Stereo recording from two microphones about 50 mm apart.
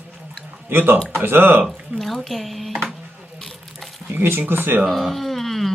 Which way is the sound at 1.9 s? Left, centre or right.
Right.